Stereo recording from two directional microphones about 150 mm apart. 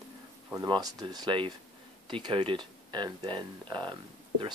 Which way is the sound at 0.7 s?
25° right (ahead or behind).